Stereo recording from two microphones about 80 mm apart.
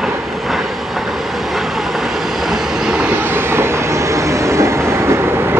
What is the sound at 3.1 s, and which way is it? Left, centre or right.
Train, right.